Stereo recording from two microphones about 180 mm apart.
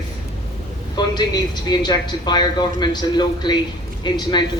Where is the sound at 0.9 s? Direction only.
25° left (ahead or behind).